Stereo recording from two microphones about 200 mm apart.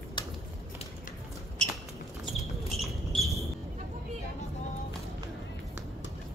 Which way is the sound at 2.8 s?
Centre (ahead or behind).